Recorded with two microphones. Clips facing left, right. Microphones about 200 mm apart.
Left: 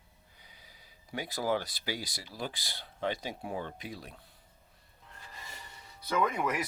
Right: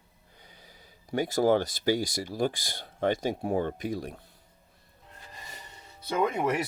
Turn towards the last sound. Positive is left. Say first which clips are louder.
# right 5 dB
turn(degrees=-30)  # may be behind; listen again after turning